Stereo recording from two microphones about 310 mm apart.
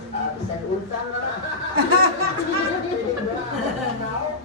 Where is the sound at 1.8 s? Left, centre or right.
Right.